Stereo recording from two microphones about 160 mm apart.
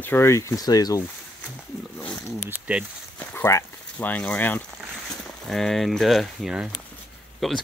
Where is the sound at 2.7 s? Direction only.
10° right (ahead or behind).